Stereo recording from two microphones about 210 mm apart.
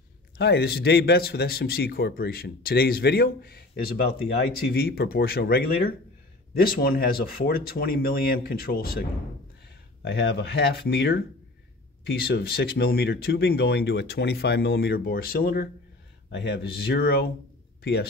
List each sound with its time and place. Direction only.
0.4 s speech: 50° left (ahead or behind)
6.6 s speech: 45° left (ahead or behind)
10.0 s speech: 50° left (ahead or behind)